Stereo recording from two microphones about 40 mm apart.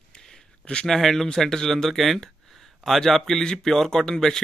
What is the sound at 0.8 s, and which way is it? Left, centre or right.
Speech, centre.